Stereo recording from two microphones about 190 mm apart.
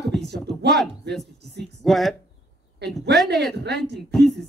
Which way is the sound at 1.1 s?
60° right (ahead or behind).